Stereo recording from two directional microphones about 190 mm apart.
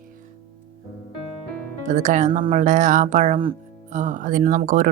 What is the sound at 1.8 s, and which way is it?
Speech, 40° right (ahead or behind).